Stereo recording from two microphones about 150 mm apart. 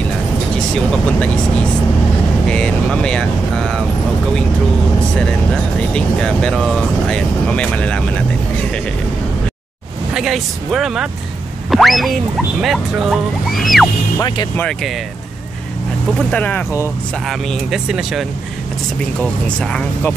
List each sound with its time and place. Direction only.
2.4 s speech: 5° left (ahead or behind)
5.9 s speech: 5° left (ahead or behind)
10.1 s speech: centre (ahead or behind)
14.2 s speech: 30° left (ahead or behind)
14.6 s speech: 5° left (ahead or behind)
16.2 s speech: 10° left (ahead or behind)
17.3 s speech: centre (ahead or behind)
19.2 s speech: 5° left (ahead or behind)